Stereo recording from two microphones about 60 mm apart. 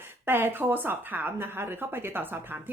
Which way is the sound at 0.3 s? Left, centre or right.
Right.